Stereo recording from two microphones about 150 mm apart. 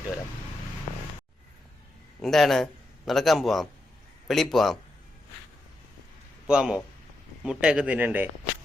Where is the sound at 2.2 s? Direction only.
Centre (ahead or behind).